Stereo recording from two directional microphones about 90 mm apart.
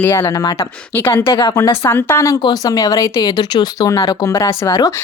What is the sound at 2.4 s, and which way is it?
Speech, 45° left (ahead or behind).